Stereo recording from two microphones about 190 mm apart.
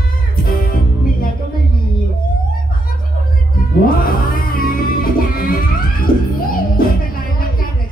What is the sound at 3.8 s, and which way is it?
Music, 50° left (ahead or behind).